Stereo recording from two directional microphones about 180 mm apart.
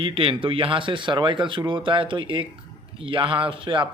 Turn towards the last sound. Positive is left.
turn(degrees=-30)  # may be behind; listen again after turning